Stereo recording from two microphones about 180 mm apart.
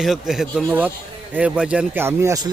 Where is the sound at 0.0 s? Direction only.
Centre (ahead or behind).